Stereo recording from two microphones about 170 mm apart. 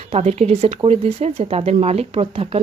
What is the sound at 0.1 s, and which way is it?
Speech, 40° right (ahead or behind).